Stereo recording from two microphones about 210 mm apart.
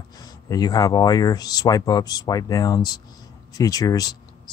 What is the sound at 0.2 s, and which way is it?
Speech, 20° left (ahead or behind).